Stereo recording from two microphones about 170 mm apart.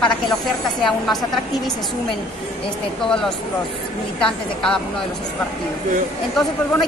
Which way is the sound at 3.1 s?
5° left (ahead or behind).